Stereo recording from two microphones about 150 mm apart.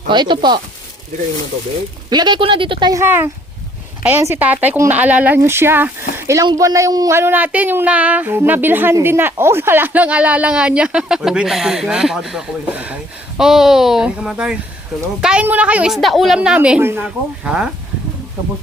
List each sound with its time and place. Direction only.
0.1 s speech: 30° right (ahead or behind)
2.0 s speech: 30° right (ahead or behind)
2.9 s speech: 15° right (ahead or behind)